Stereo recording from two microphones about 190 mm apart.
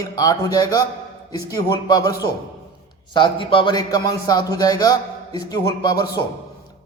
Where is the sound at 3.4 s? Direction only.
25° left (ahead or behind).